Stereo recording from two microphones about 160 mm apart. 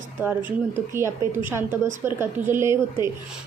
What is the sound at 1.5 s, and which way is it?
A woman's voice, 15° right (ahead or behind).